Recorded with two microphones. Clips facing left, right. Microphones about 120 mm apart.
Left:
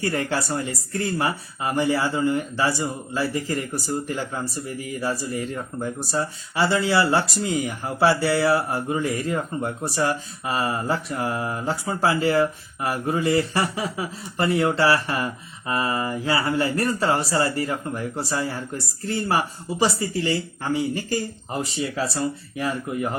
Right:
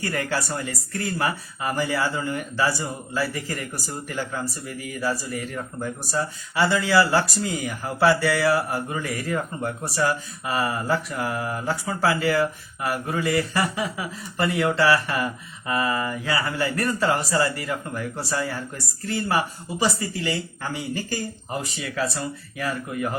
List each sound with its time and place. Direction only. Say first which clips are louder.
0.0 s speech: left 2 dB; 25° left (ahead or behind)